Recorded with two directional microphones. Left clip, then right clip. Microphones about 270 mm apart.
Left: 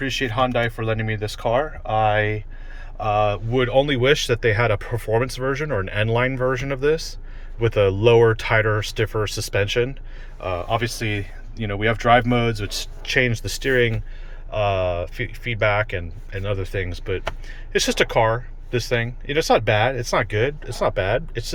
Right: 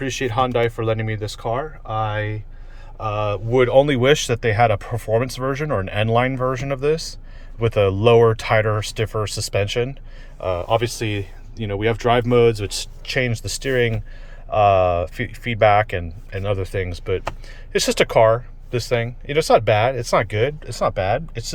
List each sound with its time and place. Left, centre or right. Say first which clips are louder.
0.0 s speech: right 1 dB; centre